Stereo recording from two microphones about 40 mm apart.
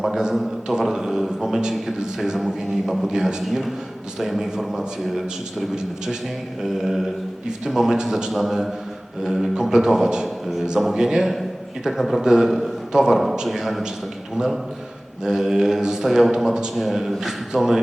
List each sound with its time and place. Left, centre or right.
0.2 s a man's voice: centre
5.0 s a man's voice: centre
10.2 s a man's voice: centre
13.5 s a man's voice: centre